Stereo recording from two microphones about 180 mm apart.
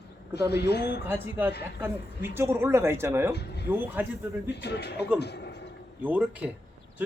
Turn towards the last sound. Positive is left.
turn(degrees=-10)  # may be behind; listen again after turning